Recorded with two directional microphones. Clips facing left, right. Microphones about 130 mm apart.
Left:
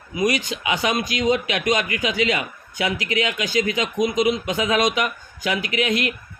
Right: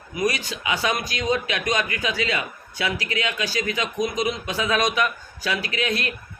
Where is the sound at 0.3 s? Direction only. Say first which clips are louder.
Left 2 dB; 20° left (ahead or behind).